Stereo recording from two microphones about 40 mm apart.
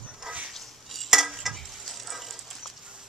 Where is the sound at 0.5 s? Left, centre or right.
Centre.